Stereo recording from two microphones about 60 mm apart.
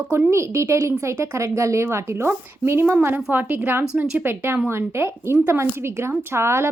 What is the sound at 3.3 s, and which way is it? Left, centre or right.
A woman's voice, right.